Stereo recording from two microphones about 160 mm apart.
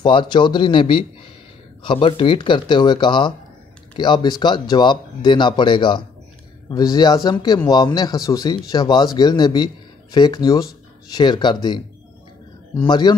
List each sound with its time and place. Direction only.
0.0 s speech: 30° left (ahead or behind)
12.8 s speech: 25° left (ahead or behind)